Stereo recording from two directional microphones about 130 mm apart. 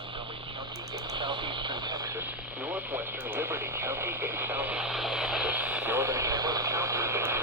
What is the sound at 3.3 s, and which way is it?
Radio, 15° right (ahead or behind).